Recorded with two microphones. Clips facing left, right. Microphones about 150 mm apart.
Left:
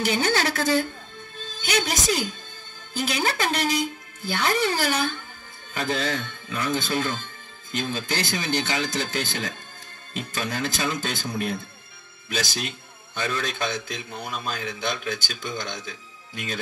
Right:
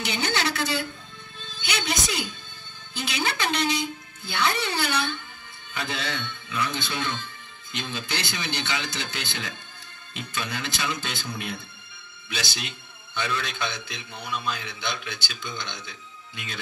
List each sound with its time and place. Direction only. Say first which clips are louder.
0.0 s a man's voice: left 4 dB; 45° left (ahead or behind)